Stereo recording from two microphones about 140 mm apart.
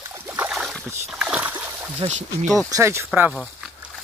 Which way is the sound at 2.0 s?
40° right (ahead or behind).